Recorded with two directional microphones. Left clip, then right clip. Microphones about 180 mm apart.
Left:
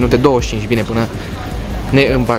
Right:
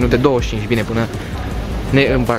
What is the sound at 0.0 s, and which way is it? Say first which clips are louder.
Speech: left 3 dB; 15° left (ahead or behind).